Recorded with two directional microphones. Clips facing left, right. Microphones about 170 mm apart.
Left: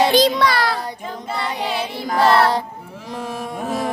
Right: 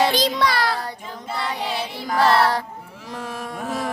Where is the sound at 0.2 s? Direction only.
65° left (ahead or behind).